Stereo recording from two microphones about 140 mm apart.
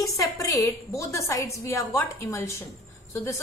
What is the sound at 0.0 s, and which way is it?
Speech, 25° left (ahead or behind).